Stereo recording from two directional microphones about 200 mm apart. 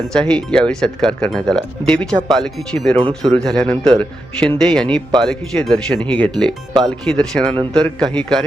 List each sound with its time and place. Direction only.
0.1 s speech: 5° left (ahead or behind)
2.1 s speech: 20° right (ahead or behind)
2.4 s speech: centre (ahead or behind)